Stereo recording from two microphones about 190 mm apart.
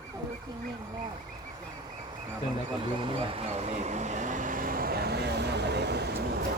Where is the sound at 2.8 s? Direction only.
25° right (ahead or behind); by 6.2 s 60° right (ahead or behind).